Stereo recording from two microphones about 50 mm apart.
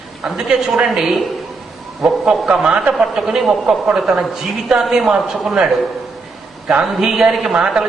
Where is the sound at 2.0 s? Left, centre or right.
Centre.